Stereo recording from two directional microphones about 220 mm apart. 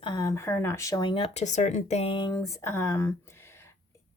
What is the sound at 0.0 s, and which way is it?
Speech, 20° left (ahead or behind).